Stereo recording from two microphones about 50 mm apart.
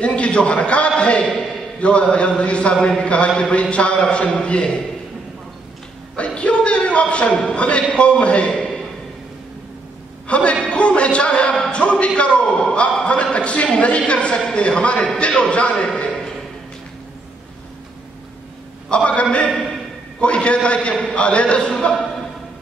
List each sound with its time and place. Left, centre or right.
0.0 s a man's voice: left
6.1 s a sound: left
7.9 s a man's voice: left
10.2 s a man's voice: left
13.0 s a man's voice: left
18.9 s a man's voice: left